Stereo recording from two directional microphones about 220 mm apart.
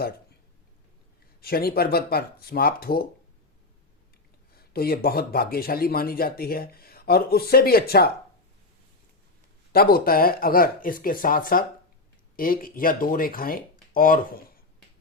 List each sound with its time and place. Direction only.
1.4 s speech: 45° left (ahead or behind)
4.5 s speech: 45° left (ahead or behind)
9.7 s speech: 40° left (ahead or behind)